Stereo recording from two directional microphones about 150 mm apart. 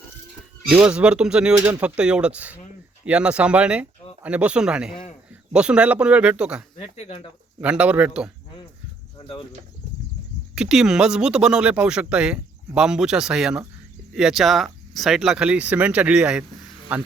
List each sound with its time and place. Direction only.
0.7 s speech: 5° right (ahead or behind)
6.7 s speech: 45° left (ahead or behind)
7.6 s speech: 10° right (ahead or behind)
9.1 s cricket: 30° left (ahead or behind)
10.5 s speech: 5° right (ahead or behind)